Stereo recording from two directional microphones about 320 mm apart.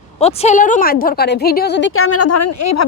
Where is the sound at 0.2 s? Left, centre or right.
Centre.